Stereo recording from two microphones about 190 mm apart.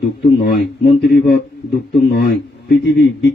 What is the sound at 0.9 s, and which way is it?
Speech, 50° left (ahead or behind).